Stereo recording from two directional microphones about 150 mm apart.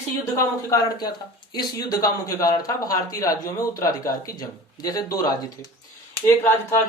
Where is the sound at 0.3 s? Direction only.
25° left (ahead or behind).